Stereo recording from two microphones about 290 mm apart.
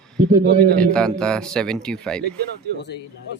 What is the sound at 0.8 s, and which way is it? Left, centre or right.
Speech, centre.